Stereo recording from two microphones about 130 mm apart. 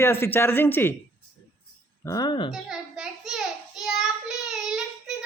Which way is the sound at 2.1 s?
30° left (ahead or behind).